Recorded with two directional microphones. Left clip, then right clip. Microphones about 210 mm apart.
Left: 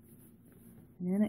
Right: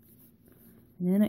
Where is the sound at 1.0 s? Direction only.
45° right (ahead or behind).